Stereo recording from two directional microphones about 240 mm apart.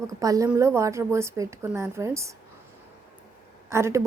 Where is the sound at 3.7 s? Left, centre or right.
Centre.